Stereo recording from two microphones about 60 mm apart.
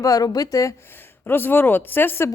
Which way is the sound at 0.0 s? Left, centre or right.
Left.